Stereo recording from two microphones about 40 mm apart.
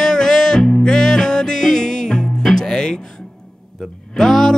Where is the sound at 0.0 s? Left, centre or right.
Centre.